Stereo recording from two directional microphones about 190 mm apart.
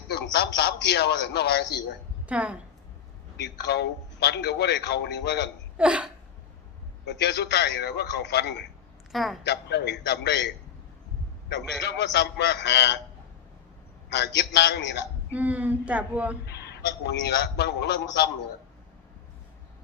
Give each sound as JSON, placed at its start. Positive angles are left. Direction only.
{"t": 0.1, "sound": "a man's voice", "side_deg": 65}
{"t": 2.2, "sound": "a woman's voice", "side_deg": -5}
{"t": 3.4, "sound": "a man's voice", "side_deg": 60}
{"t": 5.7, "sound": "hiccup", "side_deg": -5}
{"t": 7.0, "sound": "a man's voice", "side_deg": 65}
{"t": 9.1, "sound": "speech", "side_deg": 0}
{"t": 9.4, "sound": "a man's voice", "side_deg": 60}
{"t": 14.1, "sound": "a man's voice", "side_deg": 65}
{"t": 15.3, "sound": "speech", "side_deg": -10}
{"t": 16.5, "sound": "a man's voice", "side_deg": 60}